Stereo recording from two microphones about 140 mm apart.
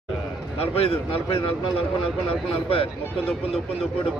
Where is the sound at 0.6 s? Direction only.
45° left (ahead or behind).